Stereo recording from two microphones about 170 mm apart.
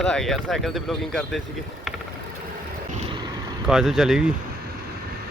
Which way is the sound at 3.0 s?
25° right (ahead or behind).